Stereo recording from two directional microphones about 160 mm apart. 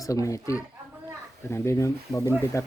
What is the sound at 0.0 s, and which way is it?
Speech, 20° left (ahead or behind).